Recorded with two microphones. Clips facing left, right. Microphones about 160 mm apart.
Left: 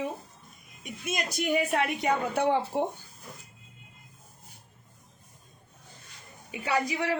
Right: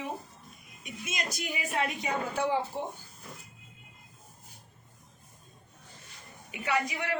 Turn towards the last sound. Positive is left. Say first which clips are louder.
# left 3 dB
turn(degrees=30)  # may be behind; listen again after turning